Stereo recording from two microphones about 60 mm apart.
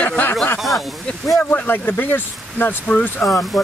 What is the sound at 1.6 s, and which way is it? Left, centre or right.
Speech, left.